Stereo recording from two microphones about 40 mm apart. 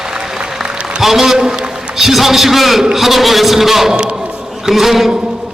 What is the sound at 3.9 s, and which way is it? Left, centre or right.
Speech, right.